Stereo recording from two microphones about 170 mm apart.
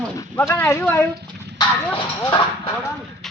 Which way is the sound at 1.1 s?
75° right (ahead or behind).